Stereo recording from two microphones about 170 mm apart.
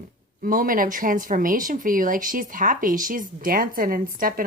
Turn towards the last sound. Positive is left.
turn(degrees=-55)  # may be behind; listen again after turning